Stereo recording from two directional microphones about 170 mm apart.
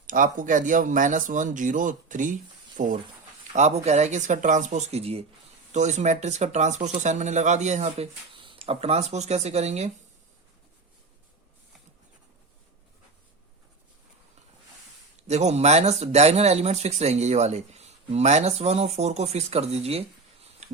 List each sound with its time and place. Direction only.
0.1 s speech: 50° right (ahead or behind)
3.5 s a sound: 45° right (ahead or behind)
3.8 s speech: 40° right (ahead or behind)
15.3 s speech: 40° right (ahead or behind)